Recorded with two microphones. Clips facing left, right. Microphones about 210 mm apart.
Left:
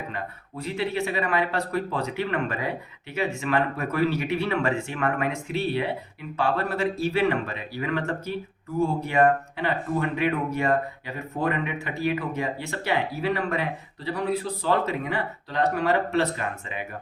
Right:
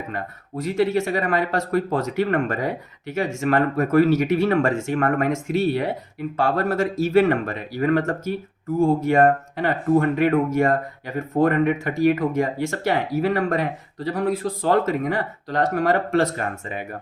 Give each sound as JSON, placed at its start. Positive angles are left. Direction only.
{"t": 0.1, "sound": "speech", "side_deg": -45}